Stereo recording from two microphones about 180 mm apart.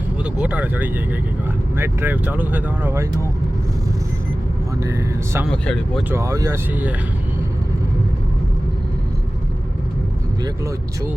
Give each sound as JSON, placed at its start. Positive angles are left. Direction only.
{"t": 0.2, "sound": "speech", "side_deg": -5}
{"t": 4.8, "sound": "speech", "side_deg": -15}
{"t": 10.4, "sound": "speech", "side_deg": -15}